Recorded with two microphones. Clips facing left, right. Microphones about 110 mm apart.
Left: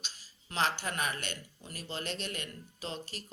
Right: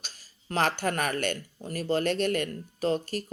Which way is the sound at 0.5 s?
50° right (ahead or behind).